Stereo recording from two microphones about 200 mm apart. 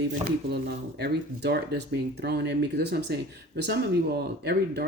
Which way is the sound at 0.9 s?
55° right (ahead or behind).